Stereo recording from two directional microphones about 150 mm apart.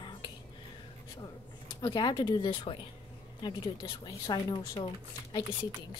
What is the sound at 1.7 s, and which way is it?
Speech, 30° left (ahead or behind).